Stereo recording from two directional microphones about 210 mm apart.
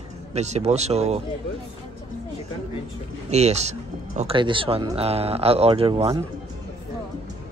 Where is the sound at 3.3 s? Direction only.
30° right (ahead or behind).